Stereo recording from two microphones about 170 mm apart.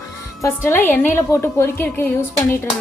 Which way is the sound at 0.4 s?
15° left (ahead or behind).